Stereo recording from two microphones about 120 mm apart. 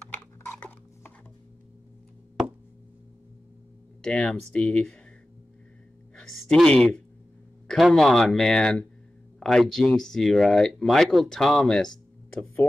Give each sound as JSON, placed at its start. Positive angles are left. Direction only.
{"t": 0.5, "sound": "cutlery", "side_deg": 15}
{"t": 4.0, "sound": "speech", "side_deg": 10}
{"t": 6.1, "sound": "speech", "side_deg": 5}